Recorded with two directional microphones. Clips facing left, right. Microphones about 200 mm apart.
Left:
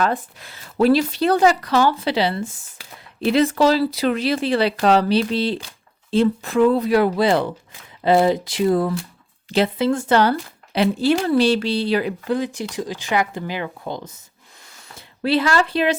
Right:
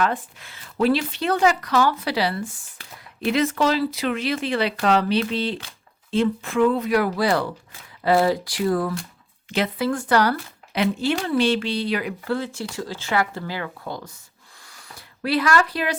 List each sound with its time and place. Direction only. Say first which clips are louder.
0.0 s speech: left 2 dB; 40° left (ahead or behind)
10.8 s speech: left 4 dB; 35° left (ahead or behind)
12.3 s speech: left 2 dB; 15° left (ahead or behind)
14.7 s a sound: left 1 dB; 25° left (ahead or behind)